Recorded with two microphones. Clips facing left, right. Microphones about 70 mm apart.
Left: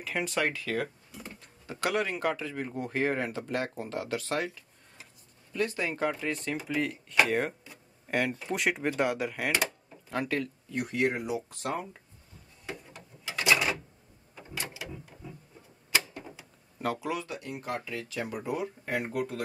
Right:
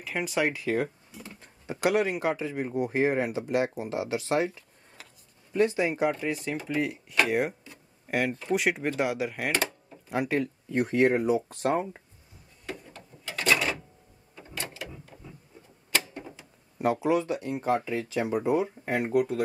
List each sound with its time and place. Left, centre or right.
0.0 s speech: centre
0.5 s speech: centre
10.0 s speech: centre
10.7 s speech: right
12.6 s a sound: centre
16.7 s speech: right